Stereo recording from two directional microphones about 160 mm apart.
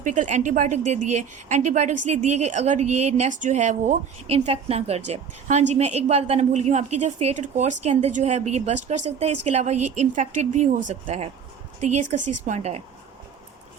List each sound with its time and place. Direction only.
0.0 s a woman's voice: 50° right (ahead or behind)